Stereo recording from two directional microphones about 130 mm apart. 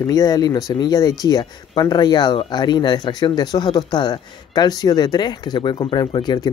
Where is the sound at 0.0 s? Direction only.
30° left (ahead or behind).